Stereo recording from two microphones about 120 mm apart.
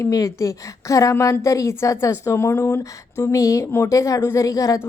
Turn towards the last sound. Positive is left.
turn(degrees=25)  # may be behind; listen again after turning